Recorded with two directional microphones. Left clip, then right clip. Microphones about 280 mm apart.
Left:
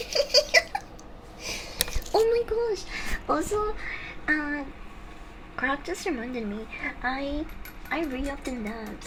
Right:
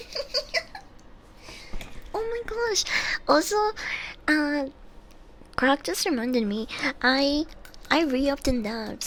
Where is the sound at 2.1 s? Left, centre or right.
Centre.